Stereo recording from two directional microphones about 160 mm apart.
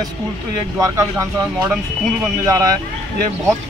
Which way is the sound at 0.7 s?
20° right (ahead or behind).